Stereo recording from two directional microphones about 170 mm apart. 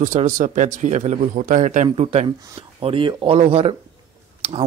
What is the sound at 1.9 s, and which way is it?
Speech, 35° right (ahead or behind).